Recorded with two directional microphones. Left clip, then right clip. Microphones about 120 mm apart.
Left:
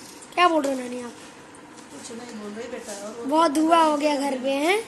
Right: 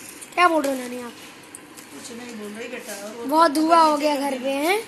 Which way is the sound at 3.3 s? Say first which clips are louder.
Right 2 dB; centre (ahead or behind).